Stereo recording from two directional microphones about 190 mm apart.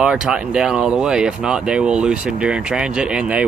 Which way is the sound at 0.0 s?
5° right (ahead or behind).